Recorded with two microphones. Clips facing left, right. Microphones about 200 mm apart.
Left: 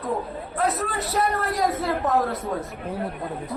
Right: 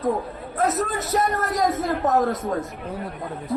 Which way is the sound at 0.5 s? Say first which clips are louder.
Right 2 dB; 45° right (ahead or behind).